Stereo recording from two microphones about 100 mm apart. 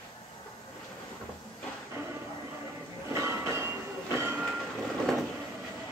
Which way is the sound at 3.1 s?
25° right (ahead or behind).